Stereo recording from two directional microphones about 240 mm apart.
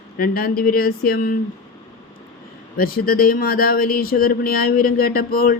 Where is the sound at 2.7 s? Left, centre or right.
Left.